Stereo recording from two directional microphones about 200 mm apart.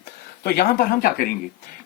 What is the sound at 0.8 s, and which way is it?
Speech, 45° left (ahead or behind).